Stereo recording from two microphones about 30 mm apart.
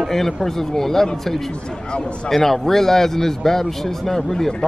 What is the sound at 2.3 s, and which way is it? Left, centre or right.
A man's voice, centre.